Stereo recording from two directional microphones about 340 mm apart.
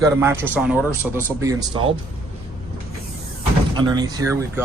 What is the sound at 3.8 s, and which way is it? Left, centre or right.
Speech, centre.